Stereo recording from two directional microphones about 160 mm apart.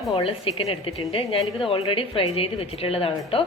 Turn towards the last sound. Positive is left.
turn(degrees=35)  # may be behind; listen again after turning